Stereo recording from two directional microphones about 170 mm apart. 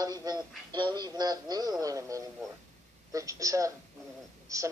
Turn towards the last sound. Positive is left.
turn(degrees=-20)  # may be behind; listen again after turning